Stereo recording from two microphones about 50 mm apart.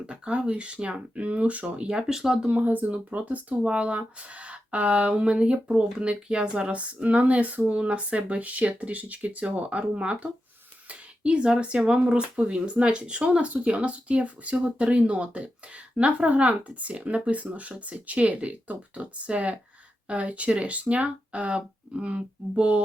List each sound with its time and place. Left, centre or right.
0.1 s speech: right
2.5 s speech: right